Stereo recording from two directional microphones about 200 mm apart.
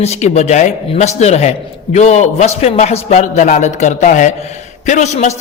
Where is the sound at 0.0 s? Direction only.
35° left (ahead or behind).